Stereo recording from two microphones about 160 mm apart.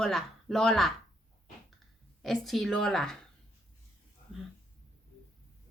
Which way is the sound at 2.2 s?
Centre (ahead or behind).